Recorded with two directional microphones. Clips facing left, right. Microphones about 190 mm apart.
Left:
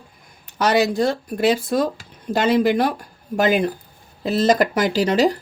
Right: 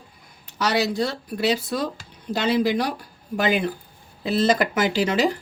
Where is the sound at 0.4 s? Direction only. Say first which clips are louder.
Left 5 dB; 50° left (ahead or behind).